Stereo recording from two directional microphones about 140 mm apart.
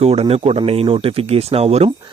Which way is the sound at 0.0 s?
45° right (ahead or behind).